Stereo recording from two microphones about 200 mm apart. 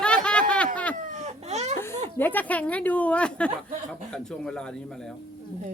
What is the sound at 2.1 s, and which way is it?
A woman's voice, 10° left (ahead or behind).